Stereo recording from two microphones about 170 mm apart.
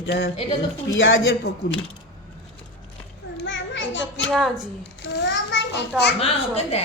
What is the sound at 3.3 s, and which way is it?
Children playing, 90° left.